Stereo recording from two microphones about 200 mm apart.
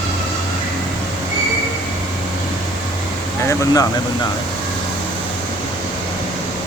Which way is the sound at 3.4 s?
15° left (ahead or behind).